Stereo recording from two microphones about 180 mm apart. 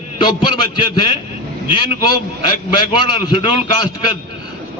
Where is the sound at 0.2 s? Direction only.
25° left (ahead or behind).